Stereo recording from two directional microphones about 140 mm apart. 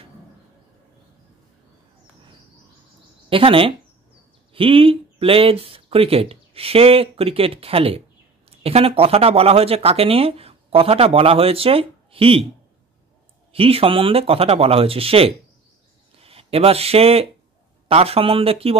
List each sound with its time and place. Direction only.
3.3 s speech: 40° right (ahead or behind)
13.5 s speech: 45° right (ahead or behind)